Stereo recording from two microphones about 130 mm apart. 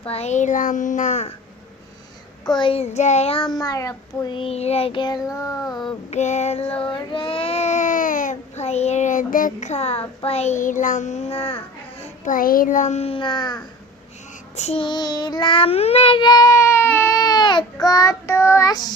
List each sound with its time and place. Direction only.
0.0 s a child's voice: 50° left (ahead or behind)
2.6 s child singing: 45° left (ahead or behind)
3.4 s a child's voice: 30° left (ahead or behind)
4.4 s child singing: 50° left (ahead or behind); by 5.9 s 30° left (ahead or behind)
6.1 s a child's voice: 65° left (ahead or behind)
6.8 s a child's voice: 40° left (ahead or behind)
12.2 s a child's voice: 90° left; by 13.6 s 35° left (ahead or behind)
14.5 s child singing: 60° left (ahead or behind)
14.8 s child singing: 35° left (ahead or behind)
16.2 s baby cry: 30° left (ahead or behind)